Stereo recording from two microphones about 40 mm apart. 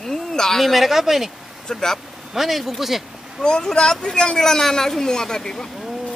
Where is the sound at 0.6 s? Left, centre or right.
Centre.